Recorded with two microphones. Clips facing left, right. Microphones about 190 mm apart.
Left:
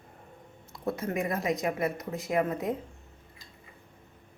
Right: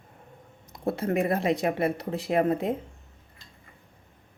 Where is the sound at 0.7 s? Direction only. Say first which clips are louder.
Right 5 dB; 30° right (ahead or behind).